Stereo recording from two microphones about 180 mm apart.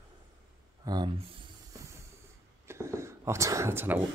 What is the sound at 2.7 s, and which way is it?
Speech, 15° right (ahead or behind).